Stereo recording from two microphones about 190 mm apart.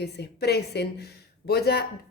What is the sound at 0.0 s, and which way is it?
Speech, 60° left (ahead or behind).